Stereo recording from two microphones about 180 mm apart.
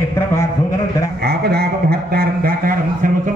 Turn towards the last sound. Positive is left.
turn(degrees=-50)  # may be behind; listen again after turning